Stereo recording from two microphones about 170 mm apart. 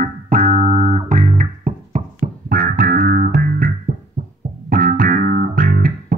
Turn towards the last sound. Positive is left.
turn(degrees=-55)  # may be behind; listen again after turning